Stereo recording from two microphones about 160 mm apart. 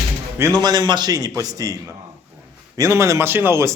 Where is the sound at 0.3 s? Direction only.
20° right (ahead or behind).